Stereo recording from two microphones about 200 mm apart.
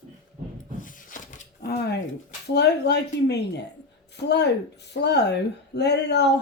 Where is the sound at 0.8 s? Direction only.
40° left (ahead or behind).